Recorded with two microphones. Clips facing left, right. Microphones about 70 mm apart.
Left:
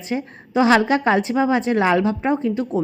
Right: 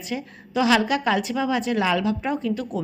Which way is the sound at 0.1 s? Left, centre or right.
Left.